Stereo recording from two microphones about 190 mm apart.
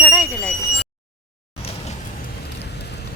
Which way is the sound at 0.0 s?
Centre (ahead or behind).